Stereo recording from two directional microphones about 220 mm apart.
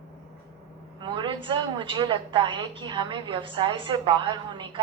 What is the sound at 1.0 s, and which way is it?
A woman's voice, 20° right (ahead or behind).